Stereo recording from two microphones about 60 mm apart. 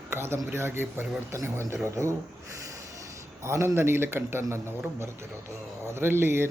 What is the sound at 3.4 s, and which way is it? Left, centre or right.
A man's voice, right.